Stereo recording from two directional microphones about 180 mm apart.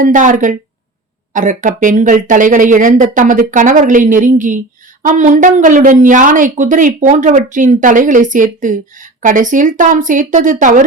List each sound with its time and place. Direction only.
0.0 s a woman's voice: 45° right (ahead or behind)